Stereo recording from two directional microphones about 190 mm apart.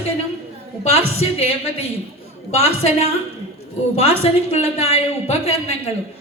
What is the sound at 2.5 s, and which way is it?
A woman's voice, 30° left (ahead or behind).